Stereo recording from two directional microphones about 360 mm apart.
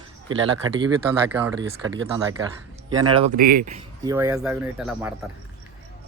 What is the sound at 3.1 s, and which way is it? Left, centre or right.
Speech, right.